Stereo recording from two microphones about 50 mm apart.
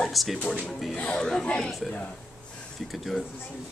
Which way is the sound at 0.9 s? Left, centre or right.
Centre.